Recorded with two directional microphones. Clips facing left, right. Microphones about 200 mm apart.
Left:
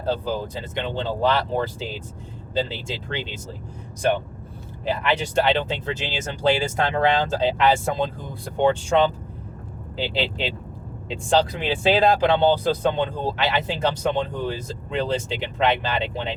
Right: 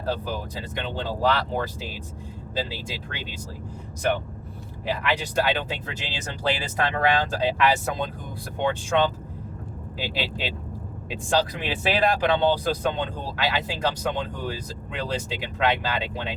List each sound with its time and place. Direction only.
0.0 s speech: 25° left (ahead or behind)
4.9 s speech: 25° left (ahead or behind)
10.0 s speech: 25° left (ahead or behind)